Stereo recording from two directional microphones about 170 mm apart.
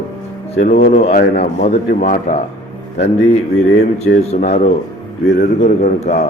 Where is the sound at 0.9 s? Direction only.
40° left (ahead or behind).